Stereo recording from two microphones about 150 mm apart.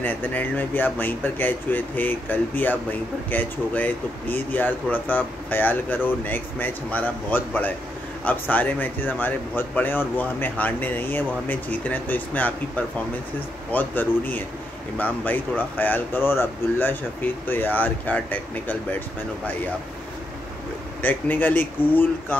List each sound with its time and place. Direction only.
0.0 s speech: 10° left (ahead or behind)
21.0 s speech: 10° left (ahead or behind)